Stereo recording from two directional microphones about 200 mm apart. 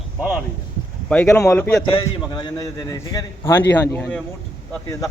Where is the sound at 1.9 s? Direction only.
25° left (ahead or behind); by 4.2 s 5° left (ahead or behind).